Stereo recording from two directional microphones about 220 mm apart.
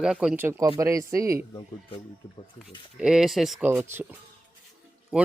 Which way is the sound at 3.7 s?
15° right (ahead or behind).